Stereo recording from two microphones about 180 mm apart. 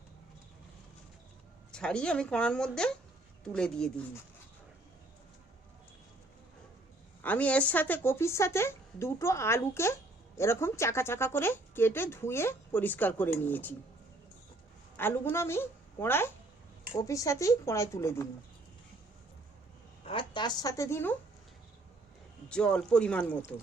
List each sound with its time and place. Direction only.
1.7 s a woman's voice: 5° left (ahead or behind)
7.2 s speech: 10° left (ahead or behind)
14.9 s a woman's voice: 10° left (ahead or behind)
20.1 s a woman's voice: 25° left (ahead or behind)
22.4 s a woman's voice: 5° left (ahead or behind)